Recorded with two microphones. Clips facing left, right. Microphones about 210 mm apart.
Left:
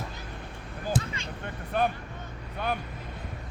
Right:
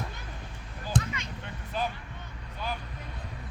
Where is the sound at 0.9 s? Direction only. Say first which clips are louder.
Right 2 dB; 5° left (ahead or behind).